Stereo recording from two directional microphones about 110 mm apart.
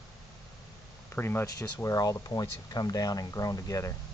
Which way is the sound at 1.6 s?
30° left (ahead or behind).